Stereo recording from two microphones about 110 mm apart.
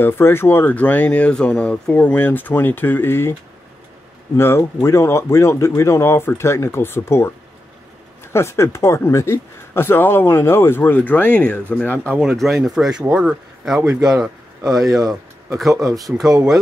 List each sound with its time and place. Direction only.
0.0 s speech: 20° left (ahead or behind)
4.4 s speech: 25° left (ahead or behind)
12.2 s speech: centre (ahead or behind)
14.8 s speech: 35° right (ahead or behind)